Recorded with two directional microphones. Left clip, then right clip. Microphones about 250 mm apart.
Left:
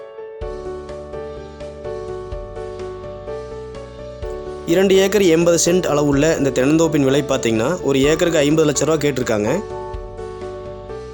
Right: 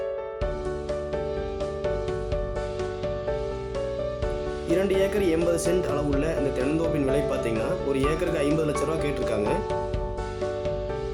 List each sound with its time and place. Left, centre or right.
4.7 s speech: left